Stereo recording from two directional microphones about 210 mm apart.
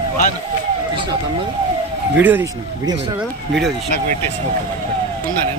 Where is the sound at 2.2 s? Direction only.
10° right (ahead or behind).